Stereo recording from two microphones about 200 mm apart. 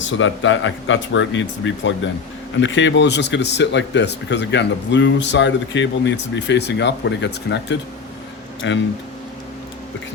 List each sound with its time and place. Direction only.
0.0 s speech: 70° left (ahead or behind)